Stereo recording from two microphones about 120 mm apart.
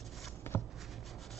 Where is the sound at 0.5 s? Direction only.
20° left (ahead or behind).